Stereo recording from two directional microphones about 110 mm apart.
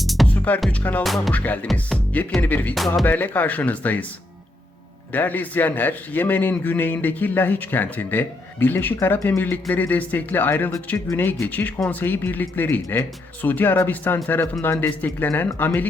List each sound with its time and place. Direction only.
0.0 s music: centre (ahead or behind)
0.7 s a man's voice: 15° left (ahead or behind)
1.0 s speech: centre (ahead or behind)
1.3 s a man's voice: 15° left (ahead or behind)
2.7 s speech: centre (ahead or behind)
3.1 s a man's voice: 15° left (ahead or behind)
5.1 s a man's voice: 15° left (ahead or behind)